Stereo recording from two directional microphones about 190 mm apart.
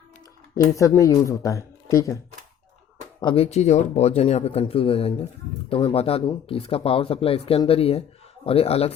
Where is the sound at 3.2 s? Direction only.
30° left (ahead or behind).